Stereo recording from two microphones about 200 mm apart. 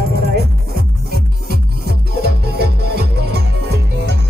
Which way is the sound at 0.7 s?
50° right (ahead or behind).